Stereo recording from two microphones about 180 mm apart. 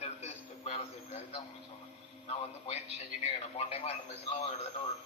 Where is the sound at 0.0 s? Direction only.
35° left (ahead or behind).